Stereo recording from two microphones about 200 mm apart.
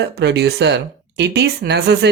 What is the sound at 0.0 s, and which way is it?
Speech, 55° right (ahead or behind).